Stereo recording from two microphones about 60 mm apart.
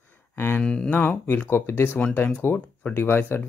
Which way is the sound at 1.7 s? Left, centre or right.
Left.